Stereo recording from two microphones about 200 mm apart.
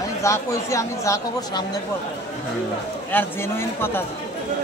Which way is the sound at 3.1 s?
10° left (ahead or behind).